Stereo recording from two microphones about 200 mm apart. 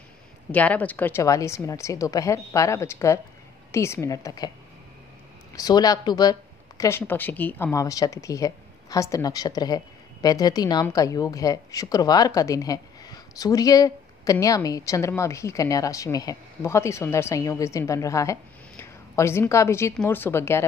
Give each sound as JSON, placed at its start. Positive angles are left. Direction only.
{"t": 0.5, "sound": "a woman's voice", "side_deg": 10}
{"t": 5.6, "sound": "a woman's voice", "side_deg": 20}